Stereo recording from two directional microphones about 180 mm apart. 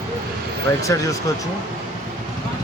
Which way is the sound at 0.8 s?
20° left (ahead or behind).